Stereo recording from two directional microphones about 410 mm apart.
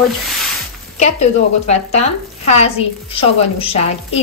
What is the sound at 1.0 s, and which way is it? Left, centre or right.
Speech, centre.